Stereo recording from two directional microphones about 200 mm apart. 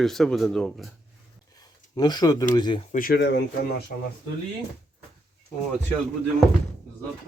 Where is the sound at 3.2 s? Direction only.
60° left (ahead or behind).